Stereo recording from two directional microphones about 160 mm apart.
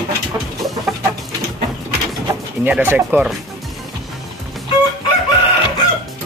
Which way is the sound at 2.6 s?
10° right (ahead or behind).